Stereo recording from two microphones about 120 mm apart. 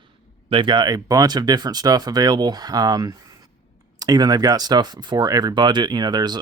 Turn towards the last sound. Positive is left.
turn(degrees=-35)  # may be behind; listen again after turning